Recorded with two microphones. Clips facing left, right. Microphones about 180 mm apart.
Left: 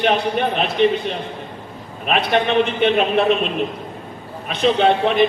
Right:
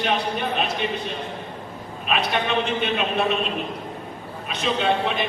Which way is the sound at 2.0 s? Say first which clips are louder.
Left 6 dB; 60° left (ahead or behind).